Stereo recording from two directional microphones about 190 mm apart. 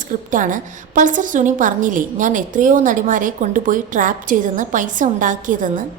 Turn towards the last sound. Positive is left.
turn(degrees=-45)  # may be behind; listen again after turning